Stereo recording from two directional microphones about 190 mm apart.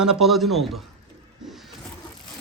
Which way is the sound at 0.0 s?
Centre (ahead or behind).